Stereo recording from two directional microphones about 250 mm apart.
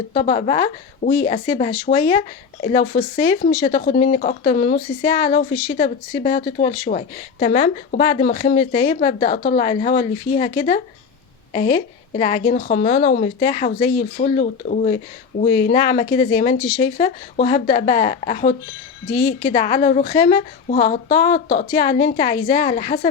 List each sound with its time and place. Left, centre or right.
0.1 s a woman's voice: left
11.5 s a woman's voice: left
13.4 s a woman's voice: left